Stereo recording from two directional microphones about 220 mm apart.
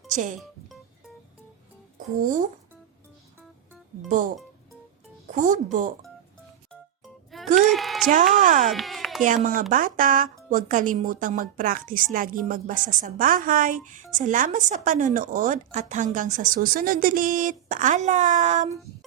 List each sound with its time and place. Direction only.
0.1 s speech: 35° right (ahead or behind)
2.2 s a woman's voice: 35° right (ahead or behind)
5.3 s a woman's voice: 35° right (ahead or behind)
7.3 s music: centre (ahead or behind)
7.7 s speech: centre (ahead or behind)
8.1 s a woman's voice: 35° right (ahead or behind)
8.7 s a sound: centre (ahead or behind)
9.2 s a woman's voice: 35° right (ahead or behind)